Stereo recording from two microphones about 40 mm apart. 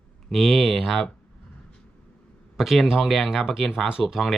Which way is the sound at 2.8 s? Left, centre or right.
Centre.